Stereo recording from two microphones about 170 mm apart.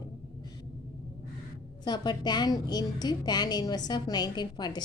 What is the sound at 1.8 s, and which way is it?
A woman's voice, 25° left (ahead or behind).